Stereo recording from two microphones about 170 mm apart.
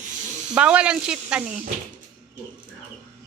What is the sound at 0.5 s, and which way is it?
Speech, 5° right (ahead or behind).